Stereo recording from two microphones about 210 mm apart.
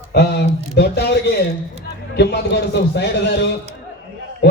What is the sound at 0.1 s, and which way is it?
Speech, 50° left (ahead or behind).